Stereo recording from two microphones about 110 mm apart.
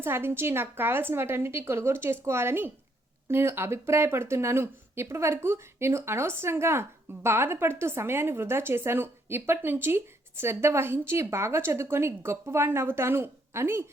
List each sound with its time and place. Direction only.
0.0 s speech: 20° right (ahead or behind)